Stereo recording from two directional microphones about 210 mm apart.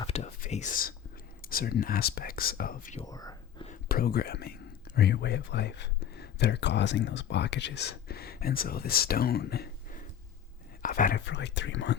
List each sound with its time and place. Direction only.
0.1 s whispering: 30° left (ahead or behind)
1.4 s speech: 45° left (ahead or behind)
3.0 s whispering: 15° left (ahead or behind)
3.7 s speech: 45° left (ahead or behind)
11.3 s speech: 55° left (ahead or behind)